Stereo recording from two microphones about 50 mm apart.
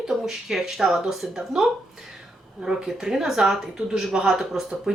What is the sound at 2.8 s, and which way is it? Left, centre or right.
Speech, centre.